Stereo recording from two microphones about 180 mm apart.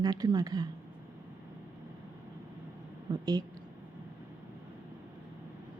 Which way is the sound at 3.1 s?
20° right (ahead or behind).